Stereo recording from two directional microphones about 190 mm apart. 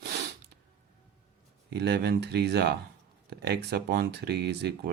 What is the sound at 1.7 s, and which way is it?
Speech, 60° right (ahead or behind).